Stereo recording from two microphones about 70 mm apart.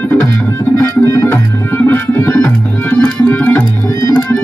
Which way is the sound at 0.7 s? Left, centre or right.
Left.